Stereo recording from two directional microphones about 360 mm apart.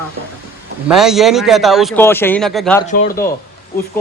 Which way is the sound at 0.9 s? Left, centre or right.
Centre.